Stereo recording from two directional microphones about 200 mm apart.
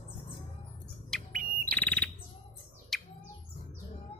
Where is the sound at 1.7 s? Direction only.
10° left (ahead or behind).